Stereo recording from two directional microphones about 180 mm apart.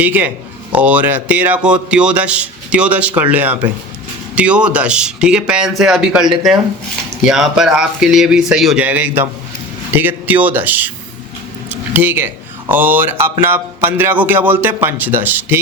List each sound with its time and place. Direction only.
0.0 s speech: 10° right (ahead or behind)